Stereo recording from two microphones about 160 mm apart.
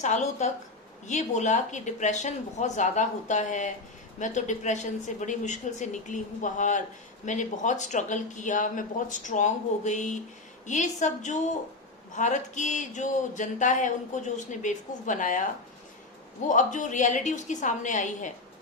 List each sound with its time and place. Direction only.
0.0 s speech: 45° left (ahead or behind)
16.5 s speech: 50° left (ahead or behind)